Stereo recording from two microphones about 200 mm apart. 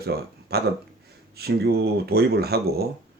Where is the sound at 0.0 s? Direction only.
50° right (ahead or behind).